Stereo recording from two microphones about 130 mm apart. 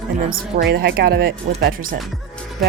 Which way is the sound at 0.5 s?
85° right.